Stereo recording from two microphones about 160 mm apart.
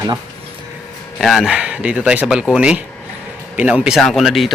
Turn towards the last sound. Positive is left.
turn(degrees=0)  # may be behind; listen again after turning